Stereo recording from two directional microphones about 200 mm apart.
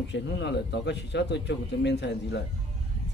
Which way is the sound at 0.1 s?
60° left (ahead or behind).